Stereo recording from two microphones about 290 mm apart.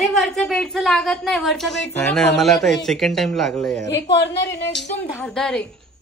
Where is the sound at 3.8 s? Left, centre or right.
Left.